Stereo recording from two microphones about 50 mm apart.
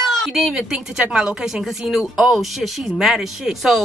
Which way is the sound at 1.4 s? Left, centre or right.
Centre.